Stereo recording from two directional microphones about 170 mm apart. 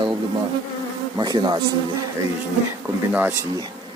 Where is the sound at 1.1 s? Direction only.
25° right (ahead or behind).